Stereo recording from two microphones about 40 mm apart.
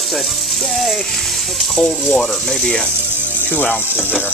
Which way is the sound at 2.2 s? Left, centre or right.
Centre.